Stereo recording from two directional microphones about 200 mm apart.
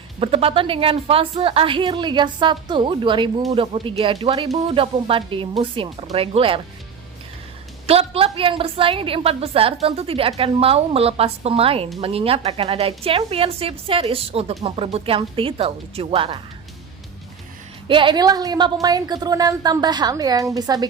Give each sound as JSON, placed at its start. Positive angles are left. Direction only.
{"t": 0.2, "sound": "a woman's voice", "side_deg": -30}
{"t": 7.9, "sound": "a woman's voice", "side_deg": -30}
{"t": 17.8, "sound": "a woman's voice", "side_deg": -25}